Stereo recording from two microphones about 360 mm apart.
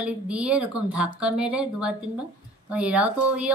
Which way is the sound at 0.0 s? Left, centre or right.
Centre.